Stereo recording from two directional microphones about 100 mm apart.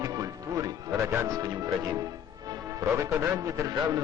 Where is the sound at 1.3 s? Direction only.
40° right (ahead or behind).